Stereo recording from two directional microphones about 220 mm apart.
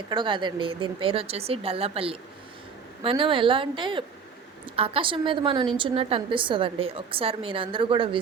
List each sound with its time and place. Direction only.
0.1 s a woman's voice: 20° right (ahead or behind)